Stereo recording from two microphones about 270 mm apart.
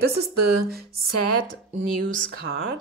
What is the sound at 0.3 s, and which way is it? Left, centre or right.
Speech, right.